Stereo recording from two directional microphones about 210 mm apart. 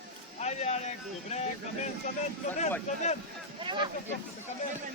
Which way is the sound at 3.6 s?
20° right (ahead or behind).